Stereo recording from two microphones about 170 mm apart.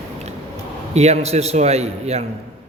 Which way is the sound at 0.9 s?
40° right (ahead or behind).